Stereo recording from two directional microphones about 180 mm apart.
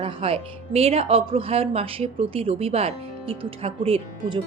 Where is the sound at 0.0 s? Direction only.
30° right (ahead or behind).